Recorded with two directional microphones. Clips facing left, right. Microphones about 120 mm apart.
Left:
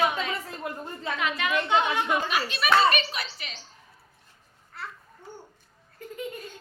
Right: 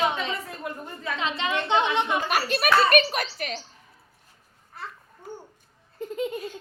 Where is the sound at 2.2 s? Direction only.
50° right (ahead or behind).